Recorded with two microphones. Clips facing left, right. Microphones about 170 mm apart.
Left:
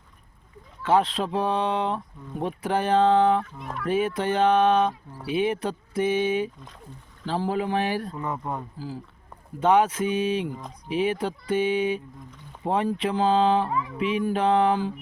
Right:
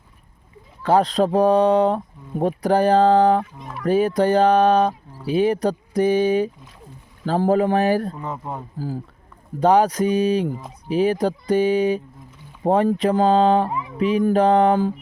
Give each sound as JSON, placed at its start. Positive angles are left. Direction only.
{"t": 0.8, "sound": "speech", "side_deg": -40}
{"t": 3.4, "sound": "speech", "side_deg": -15}
{"t": 3.8, "sound": "speech", "side_deg": -40}
{"t": 9.6, "sound": "speech", "side_deg": -35}
{"t": 13.7, "sound": "speech", "side_deg": -20}
{"t": 14.0, "sound": "speech", "side_deg": -40}